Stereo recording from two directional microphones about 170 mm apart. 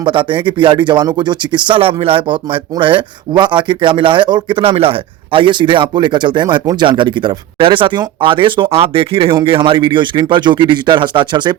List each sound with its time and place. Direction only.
0.0 s speech: 30° right (ahead or behind)